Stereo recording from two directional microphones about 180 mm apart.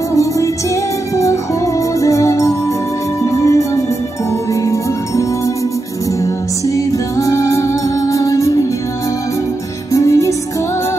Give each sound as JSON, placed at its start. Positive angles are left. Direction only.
{"t": 0.1, "sound": "music", "side_deg": 15}
{"t": 7.2, "sound": "music", "side_deg": 15}
{"t": 9.9, "sound": "music", "side_deg": 15}